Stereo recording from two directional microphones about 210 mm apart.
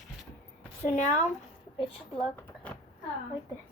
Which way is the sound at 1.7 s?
25° left (ahead or behind).